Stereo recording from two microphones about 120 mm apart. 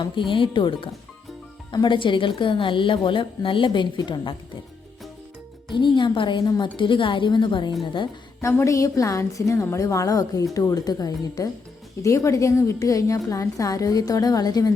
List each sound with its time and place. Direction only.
0.0 s a woman's voice: 45° left (ahead or behind)
5.6 s a woman's voice: 40° left (ahead or behind)
8.4 s a woman's voice: 25° left (ahead or behind)